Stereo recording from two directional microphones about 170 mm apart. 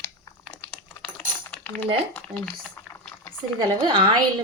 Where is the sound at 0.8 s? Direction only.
10° left (ahead or behind).